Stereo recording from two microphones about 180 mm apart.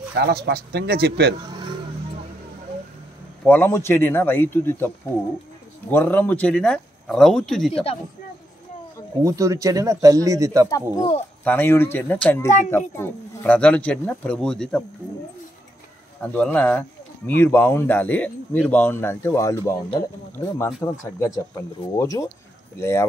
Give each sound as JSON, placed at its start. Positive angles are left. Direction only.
{"t": 0.1, "sound": "speech", "side_deg": -60}
{"t": 3.4, "sound": "speech", "side_deg": 10}
{"t": 9.2, "sound": "a man's voice", "side_deg": -20}
{"t": 10.7, "sound": "speech", "side_deg": 20}
{"t": 16.2, "sound": "speech", "side_deg": 10}
{"t": 21.9, "sound": "speech", "side_deg": 20}